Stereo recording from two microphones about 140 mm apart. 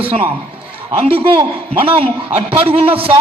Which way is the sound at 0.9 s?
45° right (ahead or behind).